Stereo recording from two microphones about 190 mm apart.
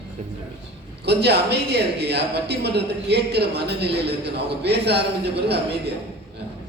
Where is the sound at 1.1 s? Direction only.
60° right (ahead or behind).